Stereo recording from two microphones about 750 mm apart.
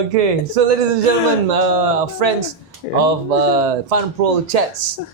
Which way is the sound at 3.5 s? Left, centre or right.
Right.